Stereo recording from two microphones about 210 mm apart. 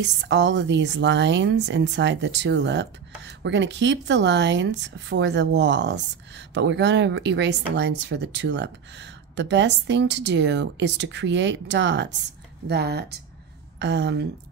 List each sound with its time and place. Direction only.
0.0 s speech: 55° right (ahead or behind)